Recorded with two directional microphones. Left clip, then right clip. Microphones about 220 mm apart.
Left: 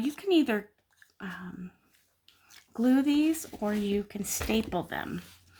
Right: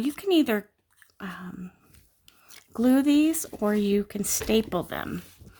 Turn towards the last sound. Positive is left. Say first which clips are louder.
# right 3 dB
turn(degrees=-45)  # may be behind; listen again after turning